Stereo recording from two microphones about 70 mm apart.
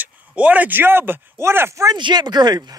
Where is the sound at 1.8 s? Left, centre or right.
Right.